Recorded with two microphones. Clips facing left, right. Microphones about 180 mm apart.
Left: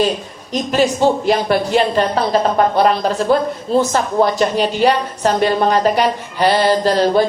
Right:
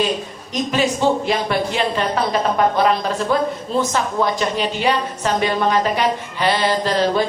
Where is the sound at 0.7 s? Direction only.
40° left (ahead or behind).